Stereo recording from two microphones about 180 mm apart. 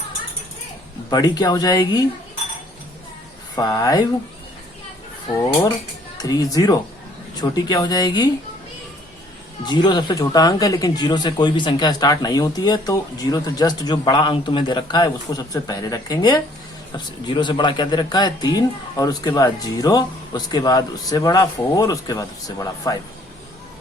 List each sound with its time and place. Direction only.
1.1 s speech: 20° left (ahead or behind)
3.5 s speech: 20° left (ahead or behind)
6.1 s speech: 20° left (ahead or behind)
9.6 s speech: 25° left (ahead or behind)